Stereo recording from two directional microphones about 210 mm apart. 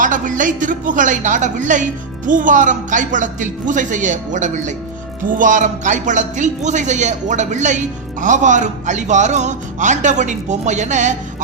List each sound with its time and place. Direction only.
0.0 s speech: 40° right (ahead or behind)